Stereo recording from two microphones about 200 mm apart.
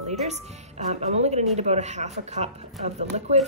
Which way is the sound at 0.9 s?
35° right (ahead or behind).